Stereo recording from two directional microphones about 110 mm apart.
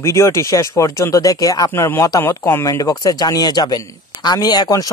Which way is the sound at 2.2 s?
20° left (ahead or behind).